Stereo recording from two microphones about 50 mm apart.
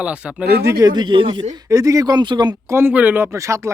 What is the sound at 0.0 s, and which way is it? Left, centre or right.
Speech, right.